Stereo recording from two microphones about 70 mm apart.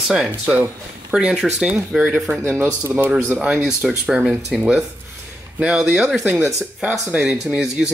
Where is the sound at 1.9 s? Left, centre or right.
Centre.